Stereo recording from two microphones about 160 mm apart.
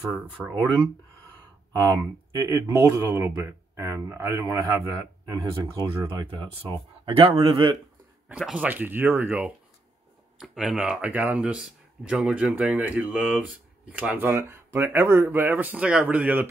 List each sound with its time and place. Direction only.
2.3 s speech: 20° right (ahead or behind)
5.9 s speech: 35° right (ahead or behind)
8.3 s speech: 5° right (ahead or behind)